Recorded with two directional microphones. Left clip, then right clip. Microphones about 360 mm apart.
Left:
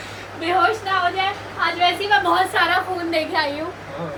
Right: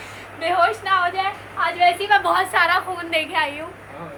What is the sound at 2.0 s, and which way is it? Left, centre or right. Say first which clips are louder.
Speech: even; centre.